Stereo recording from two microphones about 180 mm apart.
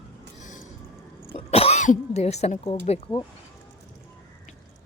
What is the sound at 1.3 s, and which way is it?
Speech, 35° left (ahead or behind).